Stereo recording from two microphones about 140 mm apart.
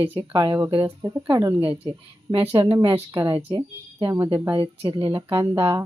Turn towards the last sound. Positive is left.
turn(degrees=-25)  # may be behind; listen again after turning